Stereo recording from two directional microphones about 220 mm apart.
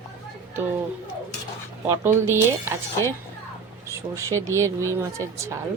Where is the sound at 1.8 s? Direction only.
10° right (ahead or behind).